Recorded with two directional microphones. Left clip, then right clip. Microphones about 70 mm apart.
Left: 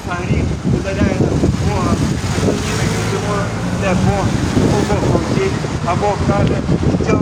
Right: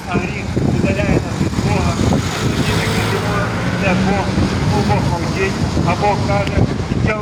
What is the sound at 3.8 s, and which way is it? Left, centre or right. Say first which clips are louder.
Vehicle: even; centre.